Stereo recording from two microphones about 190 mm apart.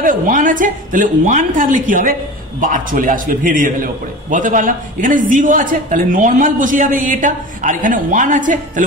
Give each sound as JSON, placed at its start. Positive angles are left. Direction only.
{"t": 0.0, "sound": "a woman's voice", "side_deg": -45}